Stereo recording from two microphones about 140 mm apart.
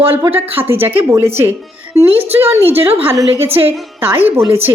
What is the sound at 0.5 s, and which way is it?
A woman's voice, 15° right (ahead or behind).